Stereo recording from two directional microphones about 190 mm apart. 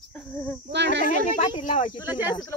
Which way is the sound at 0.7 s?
65° right (ahead or behind).